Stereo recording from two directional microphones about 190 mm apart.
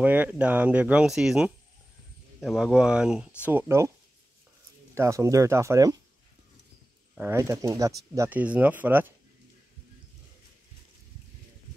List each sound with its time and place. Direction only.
0.0 s speech: 10° right (ahead or behind)
4.9 s speech: 15° right (ahead or behind)
7.2 s speech: 15° right (ahead or behind)